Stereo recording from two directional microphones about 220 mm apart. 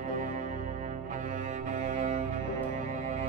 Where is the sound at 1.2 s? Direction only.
35° right (ahead or behind).